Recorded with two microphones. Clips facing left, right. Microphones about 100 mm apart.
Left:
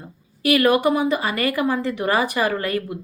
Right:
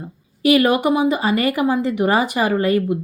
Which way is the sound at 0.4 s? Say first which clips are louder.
Right 2 dB; 25° right (ahead or behind).